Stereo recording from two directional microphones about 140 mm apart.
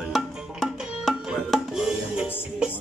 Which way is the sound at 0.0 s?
Centre (ahead or behind).